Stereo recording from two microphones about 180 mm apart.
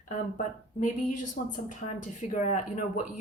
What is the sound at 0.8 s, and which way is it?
Speech, 45° left (ahead or behind).